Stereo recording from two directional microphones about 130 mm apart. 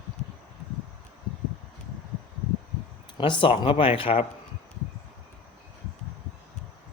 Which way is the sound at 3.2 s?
40° left (ahead or behind).